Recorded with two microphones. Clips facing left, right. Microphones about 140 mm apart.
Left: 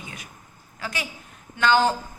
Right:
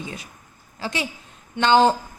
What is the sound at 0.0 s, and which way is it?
A woman's voice, 25° right (ahead or behind).